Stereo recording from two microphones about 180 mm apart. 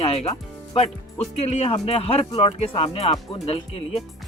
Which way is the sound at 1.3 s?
35° left (ahead or behind).